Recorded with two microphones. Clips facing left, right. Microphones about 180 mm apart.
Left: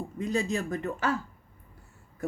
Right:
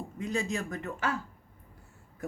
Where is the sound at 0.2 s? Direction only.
35° left (ahead or behind).